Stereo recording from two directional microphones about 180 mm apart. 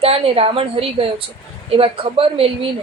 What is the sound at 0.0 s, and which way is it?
A woman's voice, 35° right (ahead or behind).